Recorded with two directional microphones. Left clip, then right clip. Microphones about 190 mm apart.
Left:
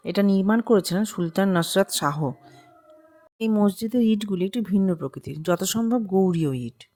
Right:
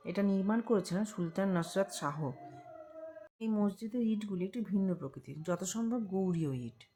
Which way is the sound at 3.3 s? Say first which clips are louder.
Left 13 dB; 50° left (ahead or behind).